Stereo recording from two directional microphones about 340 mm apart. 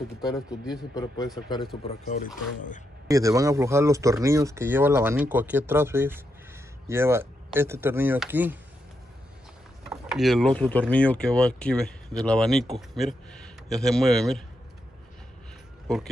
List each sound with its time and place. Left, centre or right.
0.9 s speech: centre
1.9 s speech: left
3.1 s speech: centre
9.8 s speech: centre
15.9 s speech: centre